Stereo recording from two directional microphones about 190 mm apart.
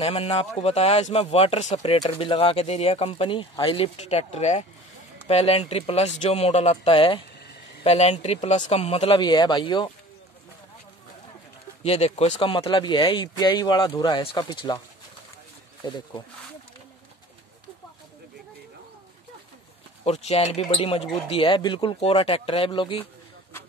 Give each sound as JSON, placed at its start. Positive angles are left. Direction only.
{"t": 0.0, "sound": "speech", "side_deg": 30}
{"t": 11.8, "sound": "speech", "side_deg": 35}
{"t": 15.8, "sound": "speech", "side_deg": 20}
{"t": 20.1, "sound": "speech", "side_deg": 35}